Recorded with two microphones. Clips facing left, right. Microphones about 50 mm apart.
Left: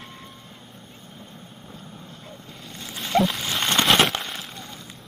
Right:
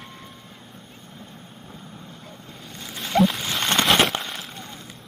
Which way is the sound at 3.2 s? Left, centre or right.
Centre.